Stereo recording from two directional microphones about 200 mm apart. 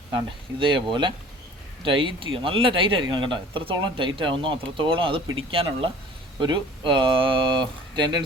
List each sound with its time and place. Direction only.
0.6 s speech: 25° right (ahead or behind)